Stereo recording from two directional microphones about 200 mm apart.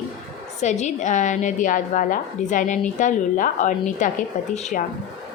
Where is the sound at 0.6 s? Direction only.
35° left (ahead or behind).